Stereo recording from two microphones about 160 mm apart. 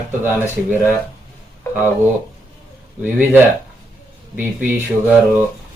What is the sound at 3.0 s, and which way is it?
Speech, 15° right (ahead or behind).